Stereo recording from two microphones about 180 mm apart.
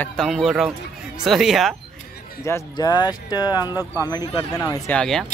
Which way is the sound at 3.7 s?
10° right (ahead or behind).